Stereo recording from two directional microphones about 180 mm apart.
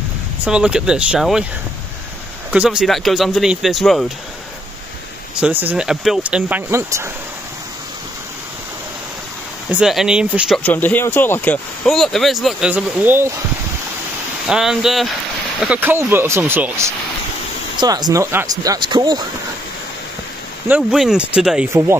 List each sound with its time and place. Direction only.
0.5 s speech: 5° right (ahead or behind)
2.5 s speech: 5° right (ahead or behind)
5.3 s speech: 10° right (ahead or behind)
9.7 s speech: 5° right (ahead or behind)
10.6 s speech: 10° left (ahead or behind); by 13.3 s 10° right (ahead or behind)
14.5 s speech: centre (ahead or behind); by 19.2 s 25° right (ahead or behind)
20.6 s speech: 5° right (ahead or behind)